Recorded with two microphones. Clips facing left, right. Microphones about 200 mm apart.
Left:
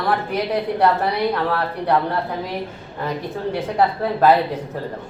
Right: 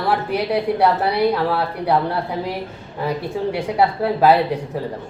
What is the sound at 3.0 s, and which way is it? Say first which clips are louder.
A woman's voice: right 3 dB; 10° right (ahead or behind).